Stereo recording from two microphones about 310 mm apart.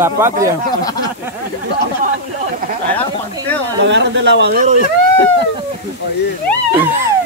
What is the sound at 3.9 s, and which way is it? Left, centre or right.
Speech, right.